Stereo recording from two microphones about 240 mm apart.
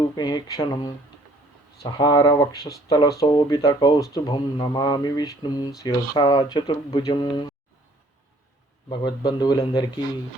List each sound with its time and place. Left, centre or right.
0.2 s speech: centre
8.9 s speech: centre